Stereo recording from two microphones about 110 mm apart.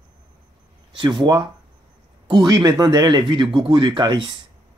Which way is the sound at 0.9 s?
45° right (ahead or behind).